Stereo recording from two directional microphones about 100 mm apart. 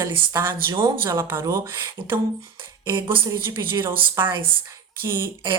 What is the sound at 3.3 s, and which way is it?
Speech, 25° right (ahead or behind).